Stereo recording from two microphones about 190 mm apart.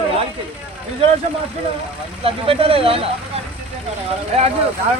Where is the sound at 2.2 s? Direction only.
30° right (ahead or behind).